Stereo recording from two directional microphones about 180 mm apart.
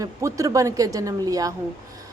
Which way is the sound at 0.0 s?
15° right (ahead or behind).